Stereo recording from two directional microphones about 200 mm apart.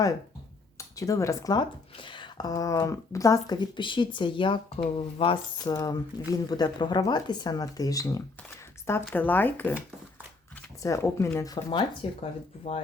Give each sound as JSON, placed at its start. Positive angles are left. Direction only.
{"t": 0.8, "sound": "speech", "side_deg": 15}
{"t": 10.8, "sound": "speech", "side_deg": 15}